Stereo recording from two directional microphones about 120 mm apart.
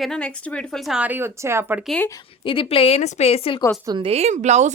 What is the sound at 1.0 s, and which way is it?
Speech, 15° right (ahead or behind).